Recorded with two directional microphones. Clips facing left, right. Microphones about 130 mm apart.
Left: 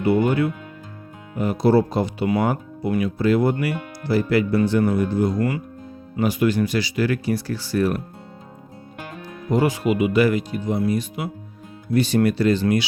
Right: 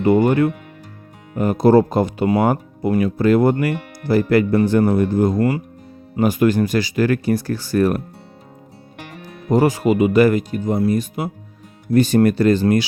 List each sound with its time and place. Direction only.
0.3 s speech: 50° right (ahead or behind)
5.4 s speech: 35° right (ahead or behind)
6.1 s speech: 45° right (ahead or behind)
9.5 s speech: 40° right (ahead or behind)